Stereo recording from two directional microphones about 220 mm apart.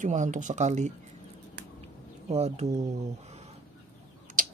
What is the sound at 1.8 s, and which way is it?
Bird, 30° right (ahead or behind).